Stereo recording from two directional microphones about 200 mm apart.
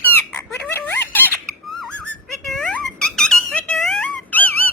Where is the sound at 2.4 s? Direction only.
5° left (ahead or behind).